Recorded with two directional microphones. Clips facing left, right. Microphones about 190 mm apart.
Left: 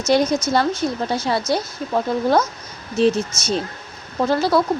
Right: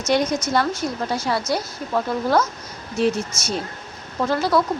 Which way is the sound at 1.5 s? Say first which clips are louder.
Left 2 dB; 25° left (ahead or behind).